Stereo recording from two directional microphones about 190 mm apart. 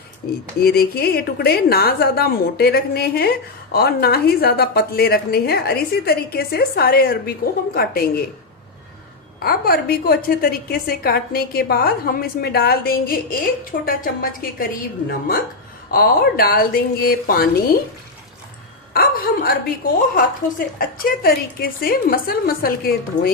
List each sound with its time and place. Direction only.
0.6 s a woman's voice: 55° left (ahead or behind)
9.4 s a woman's voice: 50° left (ahead or behind)
18.9 s a sound: 50° left (ahead or behind)
20.1 s a woman's voice: 50° left (ahead or behind)